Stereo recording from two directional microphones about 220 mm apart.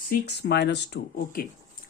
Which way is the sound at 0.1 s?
50° left (ahead or behind).